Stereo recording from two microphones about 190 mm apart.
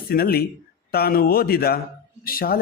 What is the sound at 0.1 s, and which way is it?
A man's voice, 50° left (ahead or behind).